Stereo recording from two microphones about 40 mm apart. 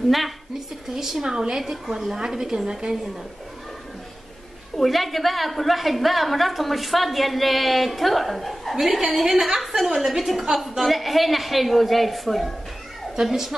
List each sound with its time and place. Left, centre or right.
1.2 s a woman's voice: centre
4.7 s a woman's voice: centre
13.1 s a woman's voice: centre